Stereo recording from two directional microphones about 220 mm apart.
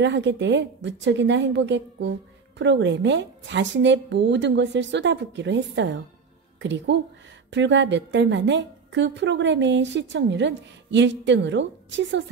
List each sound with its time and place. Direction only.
0.0 s a woman's voice: 55° right (ahead or behind)